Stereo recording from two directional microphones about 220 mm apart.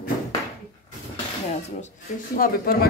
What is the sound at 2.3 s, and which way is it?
Speech, 40° left (ahead or behind).